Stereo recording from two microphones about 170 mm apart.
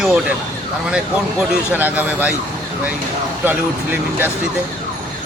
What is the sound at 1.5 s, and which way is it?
Speech, 10° right (ahead or behind).